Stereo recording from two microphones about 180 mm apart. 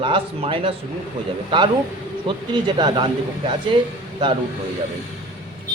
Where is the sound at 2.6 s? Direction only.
25° right (ahead or behind).